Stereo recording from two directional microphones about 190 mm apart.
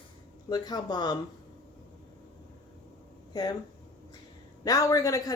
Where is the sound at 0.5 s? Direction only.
20° left (ahead or behind).